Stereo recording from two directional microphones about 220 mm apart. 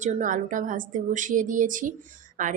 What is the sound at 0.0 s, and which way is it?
A woman's voice, 35° right (ahead or behind).